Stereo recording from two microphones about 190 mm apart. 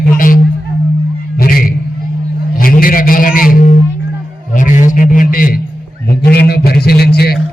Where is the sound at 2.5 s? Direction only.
50° left (ahead or behind).